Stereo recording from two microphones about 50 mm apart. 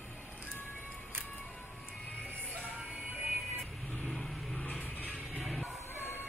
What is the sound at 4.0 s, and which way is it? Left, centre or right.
Vehicle, centre.